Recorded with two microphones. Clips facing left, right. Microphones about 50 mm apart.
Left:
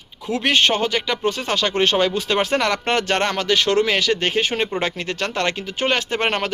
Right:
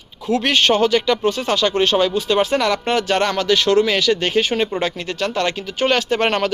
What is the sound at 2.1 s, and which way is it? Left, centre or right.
Speech, left.